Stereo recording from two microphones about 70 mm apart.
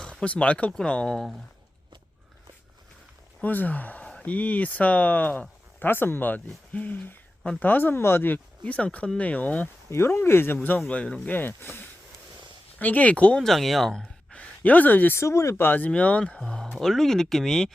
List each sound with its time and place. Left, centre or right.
0.0 s speech: centre
3.4 s speech: left
8.6 s speech: centre
9.9 s speech: left
10.8 s speech: centre
11.3 s speech: left
12.8 s speech: left
13.4 s speech: centre
14.3 s a sound: left
15.1 s speech: left
15.6 s speech: left; by 17.7 s centre